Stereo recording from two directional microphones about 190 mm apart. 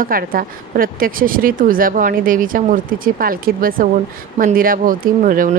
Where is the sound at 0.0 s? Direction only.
50° right (ahead or behind).